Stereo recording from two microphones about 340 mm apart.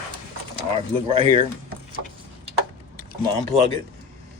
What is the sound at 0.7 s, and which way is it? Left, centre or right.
Speech, centre.